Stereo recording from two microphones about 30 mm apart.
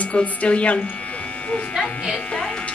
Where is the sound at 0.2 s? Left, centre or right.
Left.